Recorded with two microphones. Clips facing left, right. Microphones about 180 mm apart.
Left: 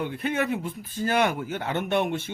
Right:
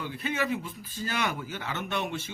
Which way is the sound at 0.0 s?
55° left (ahead or behind).